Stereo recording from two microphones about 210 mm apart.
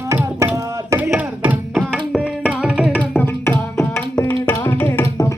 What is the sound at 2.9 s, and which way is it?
Music, 10° left (ahead or behind).